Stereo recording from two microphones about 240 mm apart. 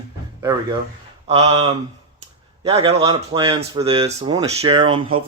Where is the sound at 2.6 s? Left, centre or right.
Right.